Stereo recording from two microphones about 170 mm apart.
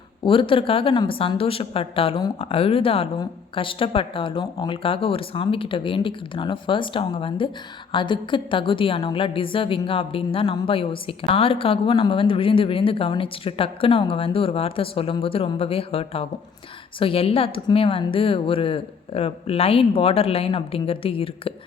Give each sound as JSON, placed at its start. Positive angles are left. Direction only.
{"t": 0.3, "sound": "a woman's voice", "side_deg": 30}